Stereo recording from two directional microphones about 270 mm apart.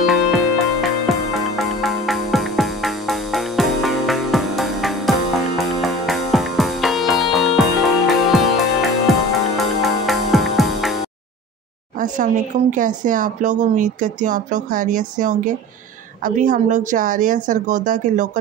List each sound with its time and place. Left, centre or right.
0.0 s music: centre
12.7 s speech: right